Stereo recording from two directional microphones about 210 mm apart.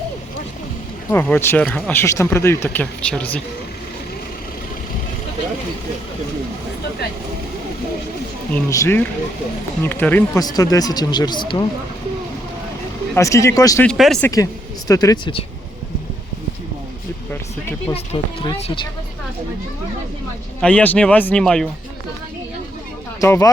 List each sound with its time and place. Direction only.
1.1 s speech: 10° left (ahead or behind)
8.7 s speech: 15° left (ahead or behind)
13.1 s speech: 15° left (ahead or behind)
13.8 s speech: centre (ahead or behind)
14.8 s speech: 15° left (ahead or behind)
17.9 s speech: 25° left (ahead or behind)
20.6 s speech: 5° left (ahead or behind)
23.2 s speech: 15° left (ahead or behind)